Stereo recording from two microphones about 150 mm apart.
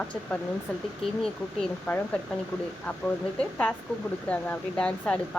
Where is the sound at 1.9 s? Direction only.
15° left (ahead or behind).